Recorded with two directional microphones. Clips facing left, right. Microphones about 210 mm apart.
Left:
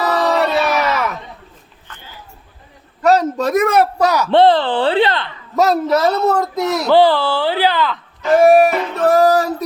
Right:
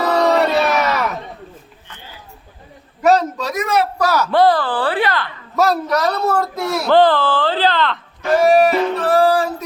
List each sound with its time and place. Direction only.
0.1 s crowd: centre (ahead or behind)
3.3 s music: 55° left (ahead or behind)
3.9 s a woman's voice: 20° left (ahead or behind)
8.4 s music: 55° left (ahead or behind)